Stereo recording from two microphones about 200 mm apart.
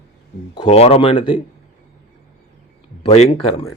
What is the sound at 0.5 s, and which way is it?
Speech, 25° left (ahead or behind).